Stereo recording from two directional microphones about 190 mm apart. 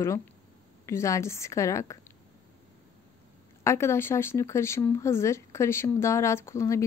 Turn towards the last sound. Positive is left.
turn(degrees=15)  # may be behind; listen again after turning